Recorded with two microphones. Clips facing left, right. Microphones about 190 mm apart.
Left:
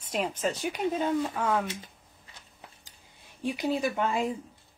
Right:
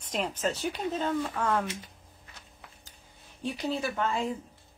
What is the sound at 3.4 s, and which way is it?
Speech, 15° left (ahead or behind).